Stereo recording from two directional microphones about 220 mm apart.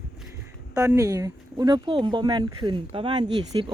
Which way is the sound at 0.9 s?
15° right (ahead or behind).